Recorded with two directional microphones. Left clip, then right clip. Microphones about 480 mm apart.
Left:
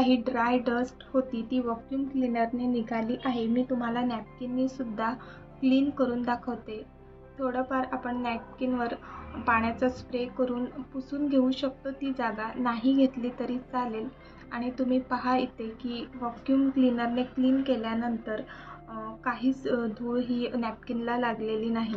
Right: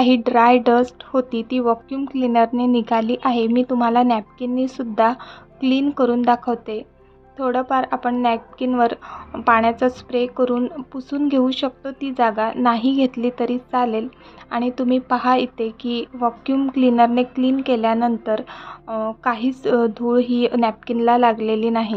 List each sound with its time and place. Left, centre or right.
0.0 s speech: right